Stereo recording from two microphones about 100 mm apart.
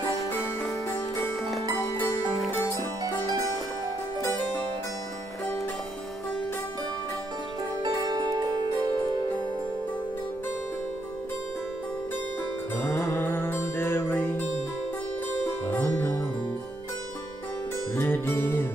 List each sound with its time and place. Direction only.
0.4 s music: centre (ahead or behind)
2.7 s music: 35° right (ahead or behind)
7.8 s zither: 40° right (ahead or behind)
12.7 s music: 25° left (ahead or behind)
15.6 s music: 20° left (ahead or behind)
17.9 s music: 25° left (ahead or behind)